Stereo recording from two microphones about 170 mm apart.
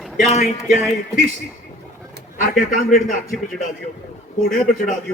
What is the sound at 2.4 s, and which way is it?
Speech, 50° left (ahead or behind).